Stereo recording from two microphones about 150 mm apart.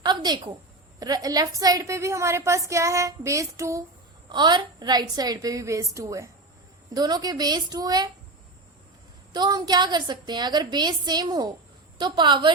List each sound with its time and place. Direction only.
0.0 s a sound: 30° right (ahead or behind)
0.9 s a woman's voice: 25° right (ahead or behind)
9.3 s a woman's voice: 30° right (ahead or behind)